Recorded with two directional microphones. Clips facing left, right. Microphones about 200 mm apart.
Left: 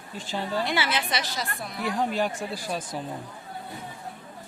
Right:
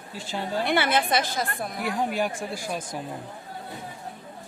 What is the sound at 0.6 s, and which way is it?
A woman's voice, 55° right (ahead or behind).